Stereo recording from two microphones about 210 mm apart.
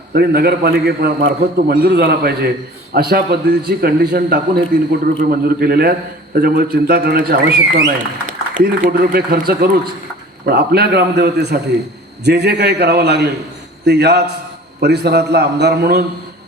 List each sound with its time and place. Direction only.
0.1 s a man's voice: 50° right (ahead or behind)